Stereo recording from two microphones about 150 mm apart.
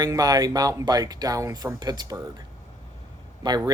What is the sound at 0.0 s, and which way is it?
Speech, 25° right (ahead or behind).